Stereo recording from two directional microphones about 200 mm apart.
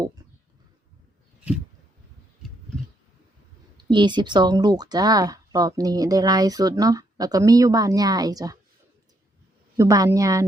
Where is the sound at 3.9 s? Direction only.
25° right (ahead or behind).